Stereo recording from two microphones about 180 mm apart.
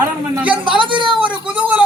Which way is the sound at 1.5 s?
10° right (ahead or behind).